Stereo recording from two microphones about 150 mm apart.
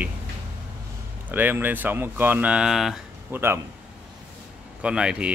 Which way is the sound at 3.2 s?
15° right (ahead or behind).